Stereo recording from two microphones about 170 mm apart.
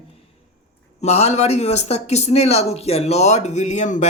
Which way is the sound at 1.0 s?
40° left (ahead or behind).